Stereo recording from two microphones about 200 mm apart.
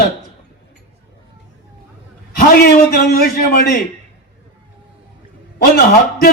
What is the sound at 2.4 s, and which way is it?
A man's voice, 50° left (ahead or behind).